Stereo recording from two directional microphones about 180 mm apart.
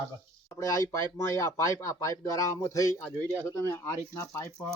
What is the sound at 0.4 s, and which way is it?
Speech, 15° left (ahead or behind).